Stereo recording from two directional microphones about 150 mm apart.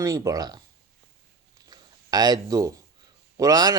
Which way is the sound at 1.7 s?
25° right (ahead or behind).